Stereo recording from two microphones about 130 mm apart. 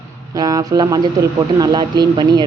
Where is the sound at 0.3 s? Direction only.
30° right (ahead or behind).